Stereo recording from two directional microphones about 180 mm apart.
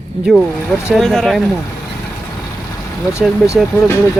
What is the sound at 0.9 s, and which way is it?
Speech, centre (ahead or behind).